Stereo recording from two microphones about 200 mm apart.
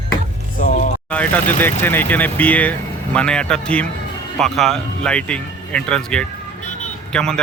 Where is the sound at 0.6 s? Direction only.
40° left (ahead or behind).